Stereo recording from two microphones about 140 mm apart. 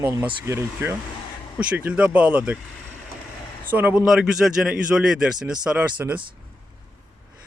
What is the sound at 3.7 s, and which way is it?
Speech, 10° right (ahead or behind).